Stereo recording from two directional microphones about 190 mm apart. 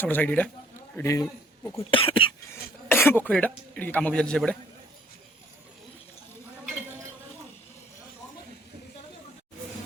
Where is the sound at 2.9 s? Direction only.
10° left (ahead or behind).